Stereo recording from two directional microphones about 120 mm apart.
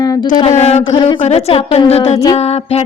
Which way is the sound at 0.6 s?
60° left (ahead or behind).